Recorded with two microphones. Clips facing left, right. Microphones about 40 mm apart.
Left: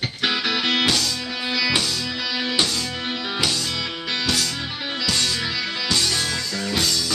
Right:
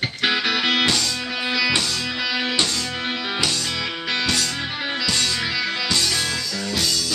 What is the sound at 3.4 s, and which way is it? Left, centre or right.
Music, centre.